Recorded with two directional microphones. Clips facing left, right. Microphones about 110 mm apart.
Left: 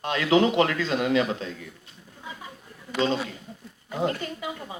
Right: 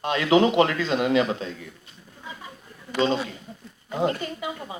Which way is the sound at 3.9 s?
25° right (ahead or behind).